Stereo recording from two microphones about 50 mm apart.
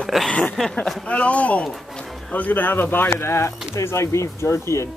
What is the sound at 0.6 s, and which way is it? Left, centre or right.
Speech, centre.